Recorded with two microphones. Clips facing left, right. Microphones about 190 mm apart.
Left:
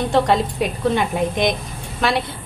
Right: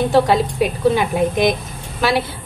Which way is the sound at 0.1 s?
5° right (ahead or behind).